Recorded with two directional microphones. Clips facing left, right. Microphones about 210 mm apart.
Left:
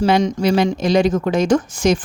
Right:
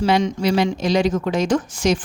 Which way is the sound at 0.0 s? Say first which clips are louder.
Left 3 dB; 45° left (ahead or behind).